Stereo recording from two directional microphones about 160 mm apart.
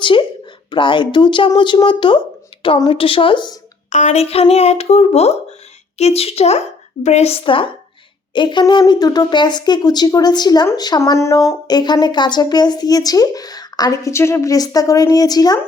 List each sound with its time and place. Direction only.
0.0 s a sound: 30° left (ahead or behind)
0.7 s speech: 30° left (ahead or behind)
3.8 s speech: 50° left (ahead or behind); by 15.5 s 25° left (ahead or behind)